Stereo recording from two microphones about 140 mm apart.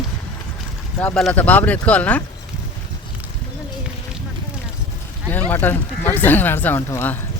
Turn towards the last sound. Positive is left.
turn(degrees=15)  # may be behind; listen again after turning